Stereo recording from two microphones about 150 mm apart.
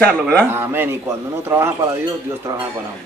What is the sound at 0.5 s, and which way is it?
Speech, 15° right (ahead or behind).